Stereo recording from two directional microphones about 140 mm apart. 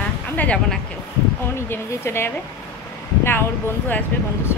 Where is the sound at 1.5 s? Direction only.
20° left (ahead or behind).